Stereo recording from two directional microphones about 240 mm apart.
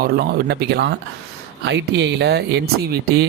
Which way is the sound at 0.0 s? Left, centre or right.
Right.